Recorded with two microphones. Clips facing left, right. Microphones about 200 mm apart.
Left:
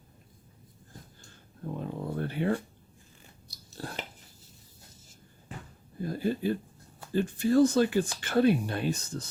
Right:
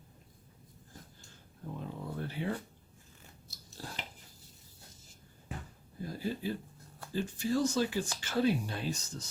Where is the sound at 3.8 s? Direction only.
60° left (ahead or behind).